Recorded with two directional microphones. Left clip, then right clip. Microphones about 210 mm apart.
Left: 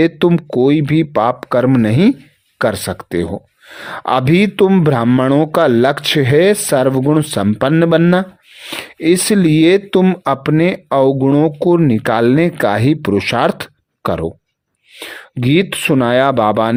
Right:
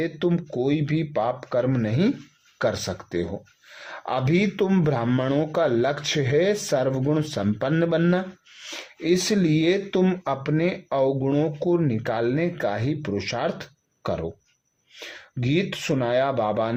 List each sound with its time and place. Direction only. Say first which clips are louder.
0.0 s speech: left 12 dB; 50° left (ahead or behind)